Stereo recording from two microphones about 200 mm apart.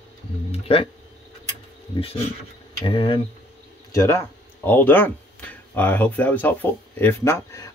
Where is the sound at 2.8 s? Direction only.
25° left (ahead or behind).